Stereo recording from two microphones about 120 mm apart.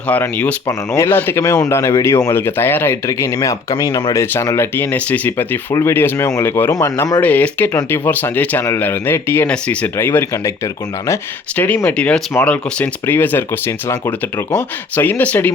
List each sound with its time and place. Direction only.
0.1 s speech: 15° left (ahead or behind)
0.7 s speech: 25° left (ahead or behind)
3.1 s speech: 30° left (ahead or behind)
11.5 s speech: 15° left (ahead or behind)